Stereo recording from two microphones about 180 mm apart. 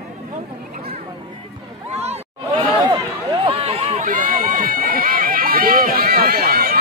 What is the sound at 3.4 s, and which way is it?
Run, 30° right (ahead or behind).